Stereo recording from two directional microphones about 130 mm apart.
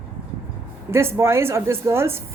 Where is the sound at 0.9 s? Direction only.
20° right (ahead or behind).